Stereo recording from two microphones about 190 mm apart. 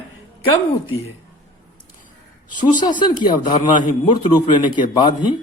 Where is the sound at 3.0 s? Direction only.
25° left (ahead or behind).